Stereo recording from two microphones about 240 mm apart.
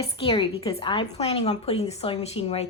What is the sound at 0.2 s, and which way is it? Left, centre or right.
A woman's voice, left.